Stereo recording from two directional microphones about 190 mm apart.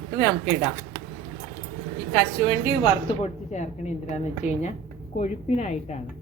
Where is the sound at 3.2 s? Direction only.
35° left (ahead or behind).